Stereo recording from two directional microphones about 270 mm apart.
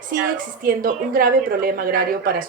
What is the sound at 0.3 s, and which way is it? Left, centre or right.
Speech, right.